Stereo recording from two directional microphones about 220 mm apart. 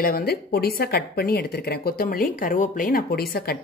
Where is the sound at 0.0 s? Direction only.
40° left (ahead or behind).